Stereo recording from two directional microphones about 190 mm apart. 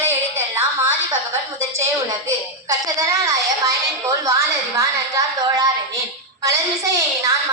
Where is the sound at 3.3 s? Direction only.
15° right (ahead or behind).